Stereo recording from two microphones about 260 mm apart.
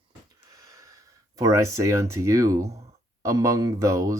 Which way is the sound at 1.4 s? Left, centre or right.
Centre.